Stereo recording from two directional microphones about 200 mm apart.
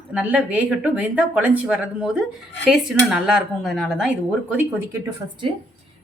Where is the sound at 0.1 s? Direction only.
5° right (ahead or behind).